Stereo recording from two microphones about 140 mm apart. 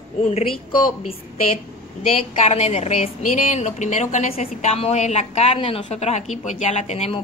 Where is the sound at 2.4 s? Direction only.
50° left (ahead or behind).